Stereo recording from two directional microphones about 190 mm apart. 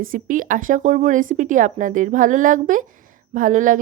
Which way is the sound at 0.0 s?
45° right (ahead or behind).